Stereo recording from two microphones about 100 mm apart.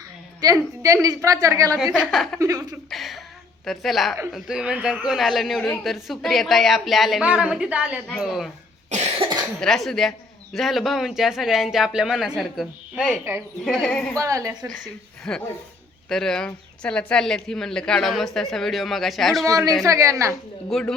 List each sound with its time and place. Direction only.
0.4 s a woman's voice: 35° right (ahead or behind)
1.9 s speech: 5° right (ahead or behind)
2.4 s a woman's voice: 35° right (ahead or behind)
2.9 s a woman's voice: centre (ahead or behind)
8.0 s speech: centre (ahead or behind)
9.6 s speech: 5° left (ahead or behind)
14.2 s a woman's voice: 30° right (ahead or behind)
15.3 s speech: 5° left (ahead or behind)
19.5 s a woman's voice: 35° right (ahead or behind)
20.7 s speech: 5° left (ahead or behind)